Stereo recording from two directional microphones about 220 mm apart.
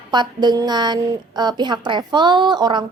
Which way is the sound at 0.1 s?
20° right (ahead or behind).